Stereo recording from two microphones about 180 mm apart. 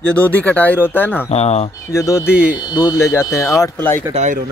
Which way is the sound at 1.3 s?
35° left (ahead or behind).